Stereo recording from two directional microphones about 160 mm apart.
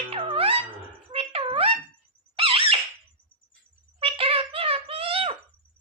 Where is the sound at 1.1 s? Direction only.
35° right (ahead or behind).